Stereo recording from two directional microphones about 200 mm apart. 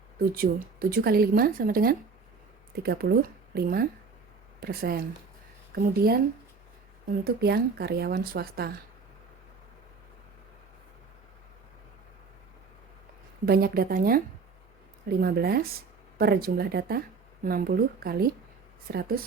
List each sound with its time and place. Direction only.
0.3 s speech: 45° right (ahead or behind)
13.4 s speech: 50° right (ahead or behind)
15.2 s speech: 50° right (ahead or behind)